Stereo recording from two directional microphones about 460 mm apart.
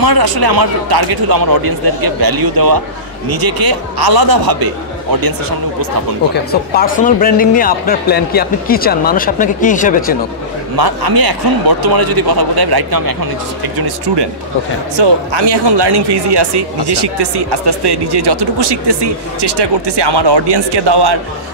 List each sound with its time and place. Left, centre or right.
0.0 s a man's voice: right
6.3 s speech: centre
10.8 s a man's voice: right